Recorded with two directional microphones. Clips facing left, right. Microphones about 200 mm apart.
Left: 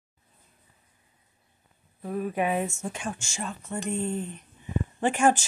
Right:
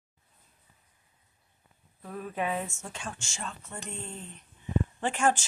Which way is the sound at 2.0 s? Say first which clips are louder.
Left 6 dB; 15° left (ahead or behind).